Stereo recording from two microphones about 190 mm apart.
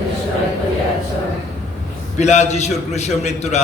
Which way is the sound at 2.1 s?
35° left (ahead or behind).